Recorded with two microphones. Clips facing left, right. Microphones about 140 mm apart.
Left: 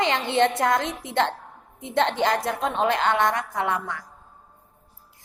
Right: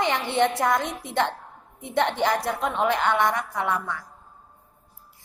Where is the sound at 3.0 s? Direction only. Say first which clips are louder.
Left 1 dB; 55° left (ahead or behind).